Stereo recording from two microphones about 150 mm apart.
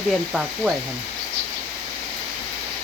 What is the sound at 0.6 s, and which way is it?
Speech, 10° right (ahead or behind).